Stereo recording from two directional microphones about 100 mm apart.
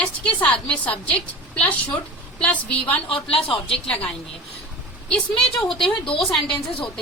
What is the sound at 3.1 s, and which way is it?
Speech, 70° left (ahead or behind).